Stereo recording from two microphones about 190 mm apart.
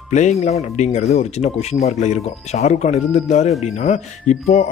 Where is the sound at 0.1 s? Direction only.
35° left (ahead or behind).